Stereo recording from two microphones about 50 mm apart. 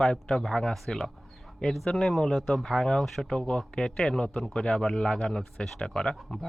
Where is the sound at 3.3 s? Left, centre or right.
Centre.